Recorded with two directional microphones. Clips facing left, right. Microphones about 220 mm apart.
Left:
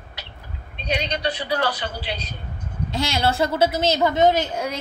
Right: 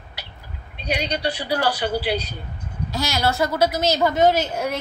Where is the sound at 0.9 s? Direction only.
35° right (ahead or behind).